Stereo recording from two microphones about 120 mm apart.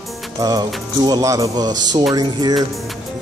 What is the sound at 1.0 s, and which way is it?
Speech, 30° right (ahead or behind).